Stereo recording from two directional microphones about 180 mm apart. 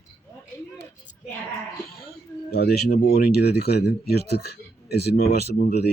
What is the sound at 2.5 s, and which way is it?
Speech, 65° left (ahead or behind).